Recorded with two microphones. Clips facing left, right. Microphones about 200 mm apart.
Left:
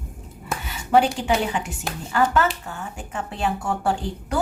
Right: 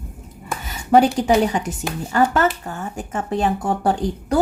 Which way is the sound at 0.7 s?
40° right (ahead or behind).